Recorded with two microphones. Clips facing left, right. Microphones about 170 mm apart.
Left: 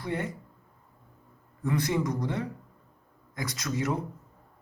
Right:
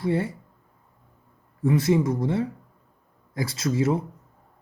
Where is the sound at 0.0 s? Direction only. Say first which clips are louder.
Right 8 dB; 30° right (ahead or behind).